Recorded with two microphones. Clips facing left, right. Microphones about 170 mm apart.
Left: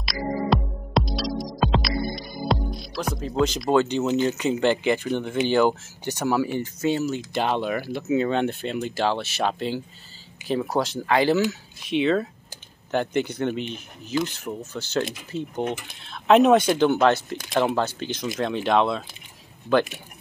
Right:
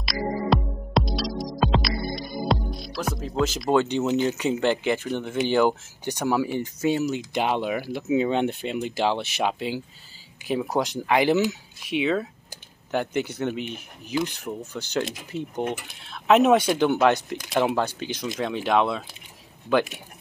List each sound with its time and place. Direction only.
0.5 s music: centre (ahead or behind)
2.1 s speech: centre (ahead or behind)